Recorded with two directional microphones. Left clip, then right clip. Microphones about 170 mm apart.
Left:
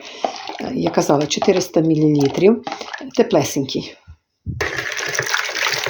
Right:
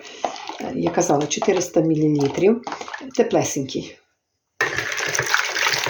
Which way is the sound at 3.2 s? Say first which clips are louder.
Left 3 dB; 40° left (ahead or behind).